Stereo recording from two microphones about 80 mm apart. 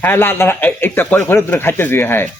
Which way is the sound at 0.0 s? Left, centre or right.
Left.